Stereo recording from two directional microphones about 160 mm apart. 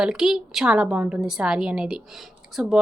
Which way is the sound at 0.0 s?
5° right (ahead or behind).